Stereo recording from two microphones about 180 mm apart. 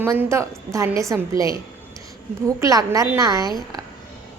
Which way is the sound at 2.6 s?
20° right (ahead or behind).